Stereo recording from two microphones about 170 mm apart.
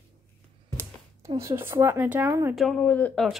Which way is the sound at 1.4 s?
15° right (ahead or behind).